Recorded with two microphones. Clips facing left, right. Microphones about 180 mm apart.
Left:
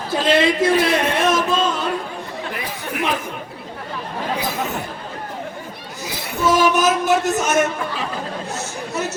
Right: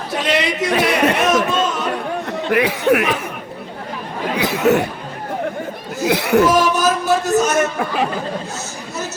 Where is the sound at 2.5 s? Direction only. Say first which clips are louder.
Right 17 dB; 75° right (ahead or behind).